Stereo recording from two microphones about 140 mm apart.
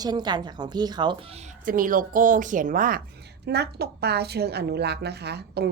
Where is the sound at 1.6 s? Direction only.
75° right (ahead or behind).